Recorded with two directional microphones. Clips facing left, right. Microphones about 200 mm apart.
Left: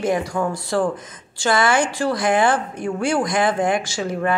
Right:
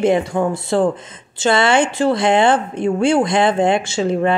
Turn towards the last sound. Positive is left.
turn(degrees=-25)  # may be behind; listen again after turning